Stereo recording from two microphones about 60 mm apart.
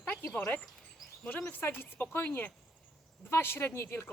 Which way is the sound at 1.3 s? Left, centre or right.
Left.